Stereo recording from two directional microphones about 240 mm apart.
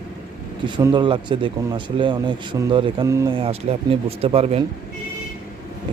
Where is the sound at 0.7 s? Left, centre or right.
Centre.